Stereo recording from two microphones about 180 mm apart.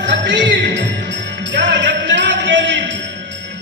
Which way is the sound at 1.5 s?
85° right.